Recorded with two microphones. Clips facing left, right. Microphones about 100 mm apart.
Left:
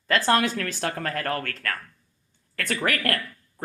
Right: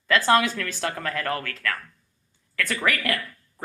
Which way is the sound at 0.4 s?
50° left (ahead or behind).